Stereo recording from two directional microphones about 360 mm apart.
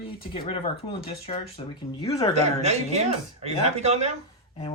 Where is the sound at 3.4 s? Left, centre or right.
Centre.